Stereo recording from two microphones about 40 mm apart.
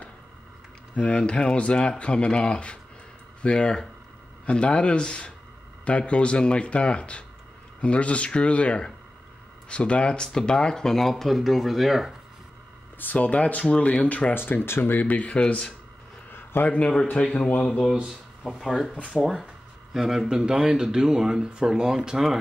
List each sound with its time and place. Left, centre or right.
0.9 s speech: left; by 12.2 s centre
13.0 s speech: left
14.3 s speech: left
14.8 s speech: left
15.2 s speech: left
16.3 s a sound: left
16.6 s speech: left
18.5 s speech: centre
19.9 s speech: centre